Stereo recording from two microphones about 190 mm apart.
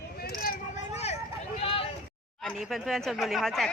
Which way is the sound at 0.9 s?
35° left (ahead or behind).